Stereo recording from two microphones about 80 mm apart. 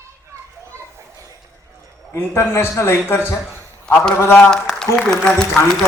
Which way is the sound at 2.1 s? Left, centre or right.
Left.